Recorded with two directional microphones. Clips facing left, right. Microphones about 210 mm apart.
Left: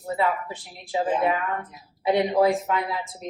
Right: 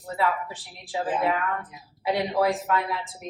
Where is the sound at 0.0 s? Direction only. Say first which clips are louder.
Left 2 dB; 20° left (ahead or behind).